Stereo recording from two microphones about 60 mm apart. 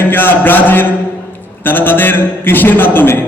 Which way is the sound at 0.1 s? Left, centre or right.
Left.